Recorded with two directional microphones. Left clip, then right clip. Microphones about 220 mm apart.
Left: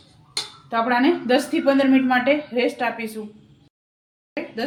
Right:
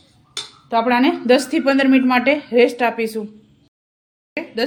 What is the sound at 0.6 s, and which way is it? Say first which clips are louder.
Speech: right 3 dB; 50° right (ahead or behind).